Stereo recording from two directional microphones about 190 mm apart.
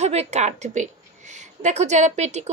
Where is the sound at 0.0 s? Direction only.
35° right (ahead or behind).